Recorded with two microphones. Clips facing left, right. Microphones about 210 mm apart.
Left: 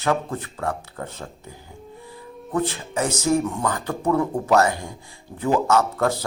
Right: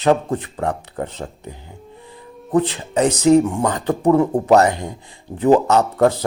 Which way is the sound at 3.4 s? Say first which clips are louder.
Right 5 dB; 30° right (ahead or behind).